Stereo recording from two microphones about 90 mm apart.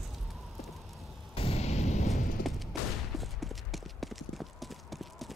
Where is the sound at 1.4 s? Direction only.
90° left.